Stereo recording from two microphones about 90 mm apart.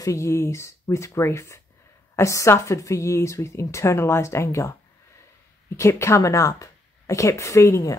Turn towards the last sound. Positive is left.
turn(degrees=35)  # may be behind; listen again after turning